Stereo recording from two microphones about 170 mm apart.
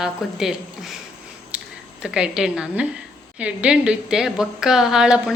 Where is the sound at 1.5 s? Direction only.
5° right (ahead or behind).